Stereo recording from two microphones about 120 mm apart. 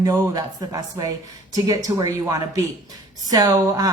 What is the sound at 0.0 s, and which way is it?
A woman's voice, 30° right (ahead or behind).